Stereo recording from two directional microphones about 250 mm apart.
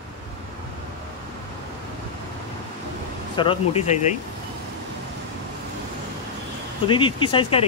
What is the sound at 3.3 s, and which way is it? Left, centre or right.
Speech, left.